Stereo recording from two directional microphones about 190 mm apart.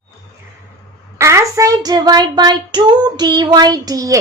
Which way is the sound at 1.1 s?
15° right (ahead or behind).